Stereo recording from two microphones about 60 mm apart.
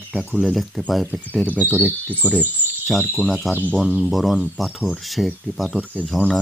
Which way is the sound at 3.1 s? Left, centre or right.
Centre.